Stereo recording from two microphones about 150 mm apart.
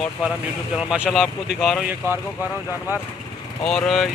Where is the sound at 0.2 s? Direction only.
10° right (ahead or behind).